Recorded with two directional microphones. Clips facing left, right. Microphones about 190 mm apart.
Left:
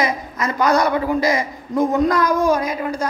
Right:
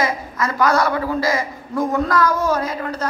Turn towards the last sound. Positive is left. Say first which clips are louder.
# left 2 dB
turn(degrees=10)  # may be behind; listen again after turning